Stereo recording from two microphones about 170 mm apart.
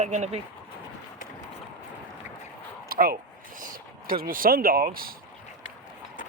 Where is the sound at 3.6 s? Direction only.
55° right (ahead or behind).